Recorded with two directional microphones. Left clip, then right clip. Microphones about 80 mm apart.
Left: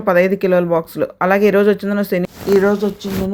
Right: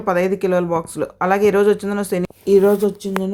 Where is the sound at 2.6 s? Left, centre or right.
Centre.